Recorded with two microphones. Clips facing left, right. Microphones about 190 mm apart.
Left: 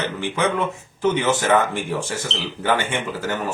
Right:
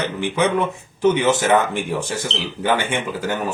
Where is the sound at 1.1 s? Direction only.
20° right (ahead or behind).